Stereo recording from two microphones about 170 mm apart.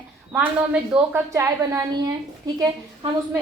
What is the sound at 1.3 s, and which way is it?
Speech, 20° right (ahead or behind).